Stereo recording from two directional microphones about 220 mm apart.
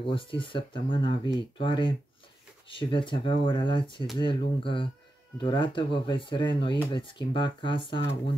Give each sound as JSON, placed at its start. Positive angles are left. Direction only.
{"t": 0.0, "sound": "speech", "side_deg": 25}